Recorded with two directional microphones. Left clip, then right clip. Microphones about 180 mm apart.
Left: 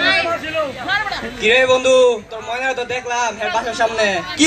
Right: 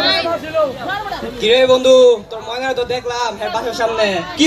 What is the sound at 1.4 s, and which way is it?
A man's voice, 55° right (ahead or behind).